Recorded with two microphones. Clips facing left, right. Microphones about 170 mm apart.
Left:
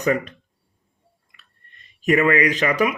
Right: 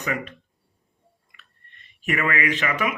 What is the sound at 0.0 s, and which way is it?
Speech, 40° left (ahead or behind).